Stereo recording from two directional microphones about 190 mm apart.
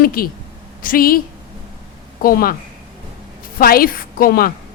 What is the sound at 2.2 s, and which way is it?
Speech, 50° left (ahead or behind).